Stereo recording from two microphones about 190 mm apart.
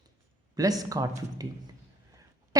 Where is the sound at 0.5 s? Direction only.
20° right (ahead or behind).